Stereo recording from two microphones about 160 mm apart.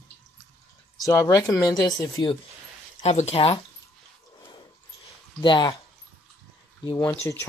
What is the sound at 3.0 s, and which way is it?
Speech, 40° left (ahead or behind).